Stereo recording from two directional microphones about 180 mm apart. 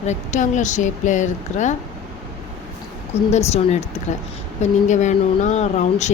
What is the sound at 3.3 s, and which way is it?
Speech, 35° left (ahead or behind).